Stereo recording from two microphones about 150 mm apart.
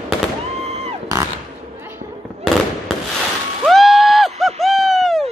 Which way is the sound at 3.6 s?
Centre (ahead or behind).